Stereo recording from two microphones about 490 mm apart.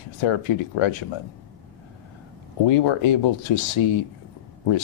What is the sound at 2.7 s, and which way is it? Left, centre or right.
Speech, left.